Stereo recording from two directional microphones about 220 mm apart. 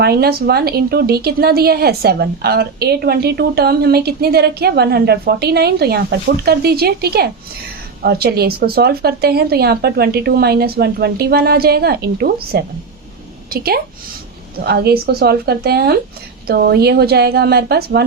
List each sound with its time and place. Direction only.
0.0 s a woman's voice: 45° right (ahead or behind)